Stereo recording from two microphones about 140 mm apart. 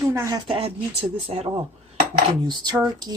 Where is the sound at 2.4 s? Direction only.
30° right (ahead or behind).